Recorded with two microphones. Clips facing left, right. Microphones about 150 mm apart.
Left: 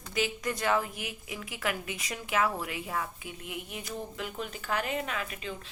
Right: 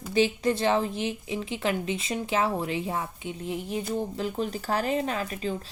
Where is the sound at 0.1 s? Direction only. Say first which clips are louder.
Right 8 dB; 30° right (ahead or behind).